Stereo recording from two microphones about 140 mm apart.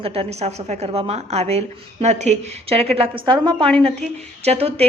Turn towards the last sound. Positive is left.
turn(degrees=-45)  # may be behind; listen again after turning